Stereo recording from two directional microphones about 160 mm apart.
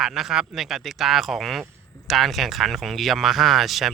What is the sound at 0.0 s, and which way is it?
Speech, centre (ahead or behind).